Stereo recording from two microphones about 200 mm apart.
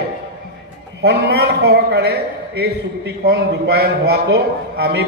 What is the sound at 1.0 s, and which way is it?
A man's voice, 55° right (ahead or behind).